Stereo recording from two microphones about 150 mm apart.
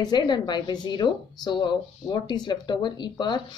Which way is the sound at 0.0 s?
30° left (ahead or behind).